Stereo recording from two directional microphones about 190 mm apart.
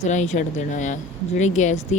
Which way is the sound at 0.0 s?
40° left (ahead or behind).